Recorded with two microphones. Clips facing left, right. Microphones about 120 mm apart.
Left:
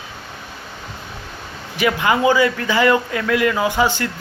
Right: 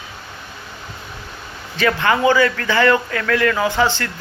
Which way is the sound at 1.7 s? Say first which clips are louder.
Even; 15° left (ahead or behind).